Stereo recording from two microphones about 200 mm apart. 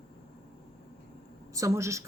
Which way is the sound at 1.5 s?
15° right (ahead or behind).